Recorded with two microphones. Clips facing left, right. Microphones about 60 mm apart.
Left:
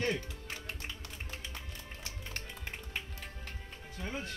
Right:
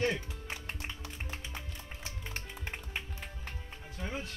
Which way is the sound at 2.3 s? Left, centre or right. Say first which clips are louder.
Right 1 dB; centre.